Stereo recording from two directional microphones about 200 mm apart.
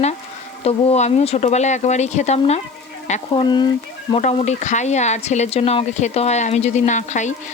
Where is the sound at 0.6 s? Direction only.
30° left (ahead or behind).